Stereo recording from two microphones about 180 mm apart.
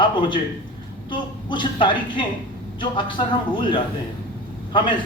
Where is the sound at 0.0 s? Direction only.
25° left (ahead or behind).